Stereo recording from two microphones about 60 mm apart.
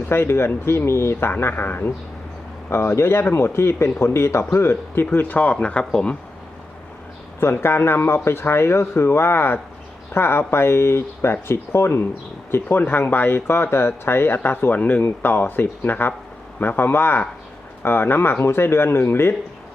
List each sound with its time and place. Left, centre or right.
0.1 s speech: left
2.6 s speech: left; by 6.1 s centre
7.3 s speech: left
14.8 s speech: left